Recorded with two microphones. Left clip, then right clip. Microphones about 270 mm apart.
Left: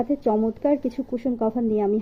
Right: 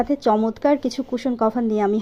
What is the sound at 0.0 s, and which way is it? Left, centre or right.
Speech, centre.